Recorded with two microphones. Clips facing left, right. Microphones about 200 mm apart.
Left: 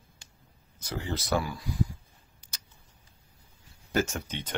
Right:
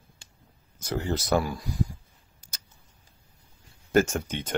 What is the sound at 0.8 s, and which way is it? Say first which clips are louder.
Speech: right 5 dB; 50° right (ahead or behind).